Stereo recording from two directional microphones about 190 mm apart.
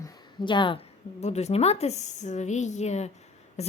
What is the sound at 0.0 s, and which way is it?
A woman's voice, 20° left (ahead or behind).